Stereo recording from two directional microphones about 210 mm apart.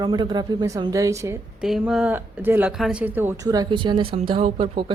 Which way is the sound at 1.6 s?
Centre (ahead or behind).